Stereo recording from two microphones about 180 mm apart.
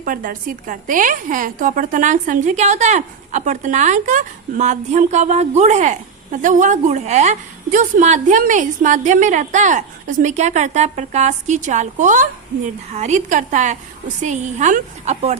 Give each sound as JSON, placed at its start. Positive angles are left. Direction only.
{"t": 0.0, "sound": "a woman's voice", "side_deg": -50}